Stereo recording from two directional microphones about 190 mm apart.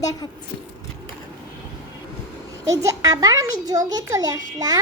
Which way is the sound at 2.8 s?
20° right (ahead or behind).